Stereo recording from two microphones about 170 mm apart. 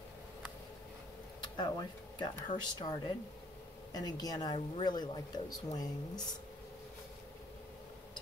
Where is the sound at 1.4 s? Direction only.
25° left (ahead or behind).